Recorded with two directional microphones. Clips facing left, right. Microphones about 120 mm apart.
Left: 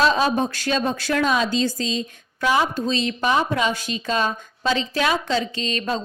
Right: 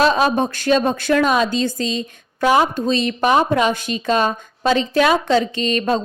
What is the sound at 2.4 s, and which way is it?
A woman's voice, 40° right (ahead or behind).